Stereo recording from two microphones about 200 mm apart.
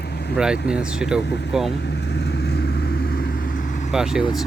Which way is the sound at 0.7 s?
5° right (ahead or behind).